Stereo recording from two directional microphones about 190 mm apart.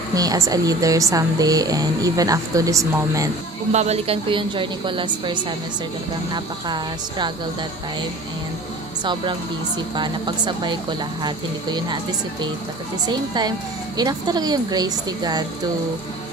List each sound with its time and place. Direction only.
0.1 s a woman's voice: 20° right (ahead or behind)
3.7 s a woman's voice: 35° right (ahead or behind)
9.0 s a woman's voice: 25° right (ahead or behind)
13.9 s a woman's voice: 20° right (ahead or behind)